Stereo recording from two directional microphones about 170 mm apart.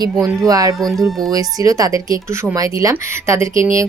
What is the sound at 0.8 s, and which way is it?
Speech, centre (ahead or behind).